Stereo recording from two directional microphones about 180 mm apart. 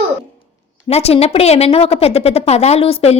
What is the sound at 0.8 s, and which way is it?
A woman's voice, 35° left (ahead or behind).